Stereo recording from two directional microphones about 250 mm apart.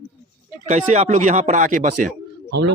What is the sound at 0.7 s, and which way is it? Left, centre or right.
Speech, right.